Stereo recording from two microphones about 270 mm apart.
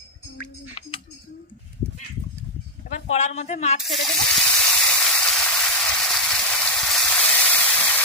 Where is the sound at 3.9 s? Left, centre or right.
Centre.